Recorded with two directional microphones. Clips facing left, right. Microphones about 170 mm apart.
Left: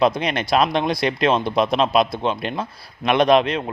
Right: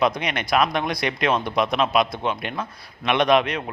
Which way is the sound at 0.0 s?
30° left (ahead or behind).